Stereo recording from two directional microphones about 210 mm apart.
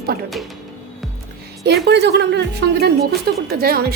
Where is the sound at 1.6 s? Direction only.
50° right (ahead or behind).